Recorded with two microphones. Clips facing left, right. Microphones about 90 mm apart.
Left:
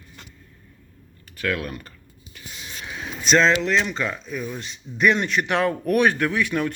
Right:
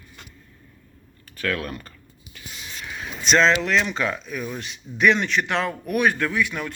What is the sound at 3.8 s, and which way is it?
Speech, 5° right (ahead or behind).